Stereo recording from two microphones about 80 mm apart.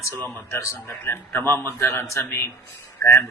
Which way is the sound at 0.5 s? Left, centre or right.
Left.